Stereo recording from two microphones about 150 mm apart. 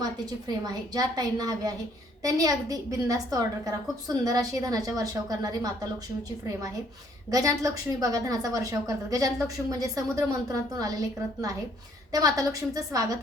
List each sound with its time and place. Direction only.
0.0 s a woman's voice: 25° right (ahead or behind)
7.3 s a woman's voice: 25° right (ahead or behind)